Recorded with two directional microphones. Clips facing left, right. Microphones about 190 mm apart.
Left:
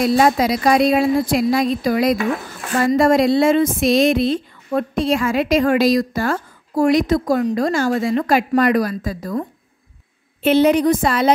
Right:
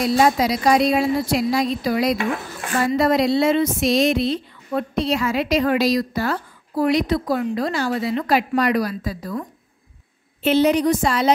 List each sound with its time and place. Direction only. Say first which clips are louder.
0.0 s speech: left 2 dB; 55° left (ahead or behind)
10.4 s a woman's voice: left 3 dB; 55° left (ahead or behind)